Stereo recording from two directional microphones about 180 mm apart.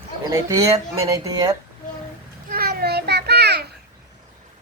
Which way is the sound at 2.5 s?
55° right (ahead or behind).